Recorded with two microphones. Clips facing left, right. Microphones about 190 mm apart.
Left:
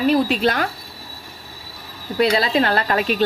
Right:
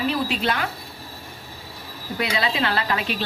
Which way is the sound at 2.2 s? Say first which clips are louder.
Left 7 dB; 40° left (ahead or behind).